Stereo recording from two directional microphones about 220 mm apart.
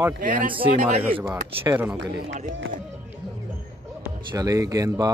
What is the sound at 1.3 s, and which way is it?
Speech, 10° right (ahead or behind).